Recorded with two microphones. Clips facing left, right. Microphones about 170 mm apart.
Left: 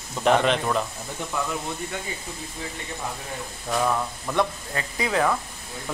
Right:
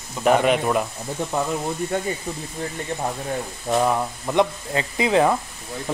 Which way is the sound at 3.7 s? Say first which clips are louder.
Right 4 dB; 20° right (ahead or behind).